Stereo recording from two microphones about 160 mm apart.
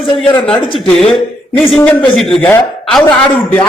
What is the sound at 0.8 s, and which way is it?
A man's voice, centre (ahead or behind).